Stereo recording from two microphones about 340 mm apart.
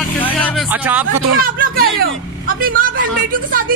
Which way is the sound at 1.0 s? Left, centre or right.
Right.